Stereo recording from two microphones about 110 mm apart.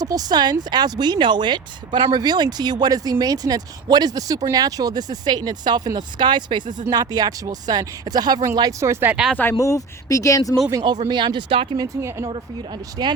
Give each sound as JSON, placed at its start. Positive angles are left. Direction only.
{"t": 0.0, "sound": "speech", "side_deg": -35}
{"t": 8.8, "sound": "speech", "side_deg": -20}
{"t": 9.3, "sound": "speech", "side_deg": 15}
{"t": 9.6, "sound": "speech", "side_deg": 30}
{"t": 10.7, "sound": "speech", "side_deg": -35}
{"t": 11.1, "sound": "speech", "side_deg": -45}
{"t": 11.8, "sound": "speech", "side_deg": -25}
{"t": 13.0, "sound": "speech", "side_deg": -45}